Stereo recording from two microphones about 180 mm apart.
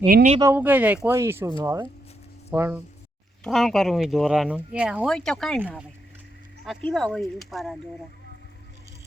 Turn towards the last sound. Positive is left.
turn(degrees=0)  # may be behind; listen again after turning